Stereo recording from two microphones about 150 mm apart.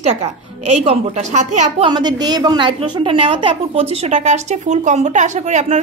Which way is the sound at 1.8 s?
30° right (ahead or behind).